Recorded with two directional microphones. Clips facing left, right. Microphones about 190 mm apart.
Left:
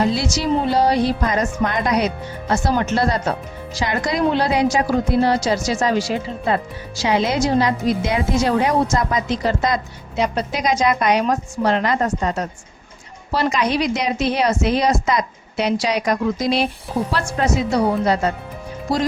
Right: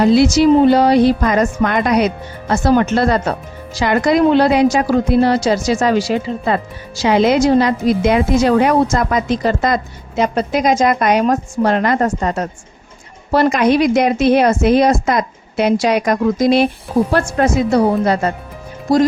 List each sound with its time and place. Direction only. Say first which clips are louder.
0.0 s a woman's voice: right 9 dB; 60° right (ahead or behind); by 6.6 s 85° right
7.0 s a woman's voice: right 6 dB; 60° right (ahead or behind)